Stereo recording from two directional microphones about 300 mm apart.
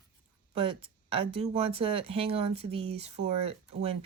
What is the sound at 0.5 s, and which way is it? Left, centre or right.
Speech, centre.